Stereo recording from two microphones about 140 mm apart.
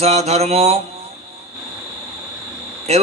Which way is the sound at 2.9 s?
50° right (ahead or behind).